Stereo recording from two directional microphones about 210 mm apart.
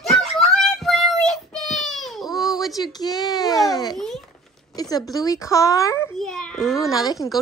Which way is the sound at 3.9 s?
Centre (ahead or behind).